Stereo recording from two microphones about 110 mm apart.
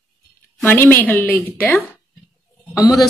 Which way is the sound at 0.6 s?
20° left (ahead or behind).